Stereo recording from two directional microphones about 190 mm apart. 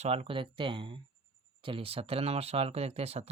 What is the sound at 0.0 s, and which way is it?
Speech, 30° right (ahead or behind).